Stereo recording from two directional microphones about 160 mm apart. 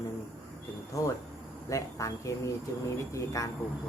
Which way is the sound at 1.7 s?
20° left (ahead or behind).